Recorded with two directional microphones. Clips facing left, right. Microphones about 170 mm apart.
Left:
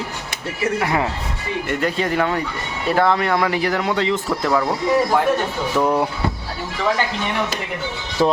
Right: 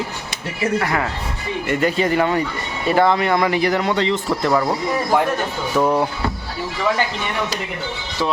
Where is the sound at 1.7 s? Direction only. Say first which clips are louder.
Right 3 dB; 5° right (ahead or behind).